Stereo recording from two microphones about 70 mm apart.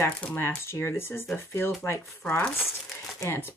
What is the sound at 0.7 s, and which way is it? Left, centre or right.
Speech, left.